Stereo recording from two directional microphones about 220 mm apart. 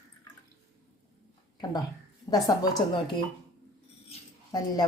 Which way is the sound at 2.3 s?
15° left (ahead or behind).